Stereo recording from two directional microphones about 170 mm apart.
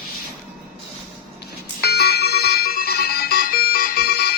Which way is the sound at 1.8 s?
70° left (ahead or behind).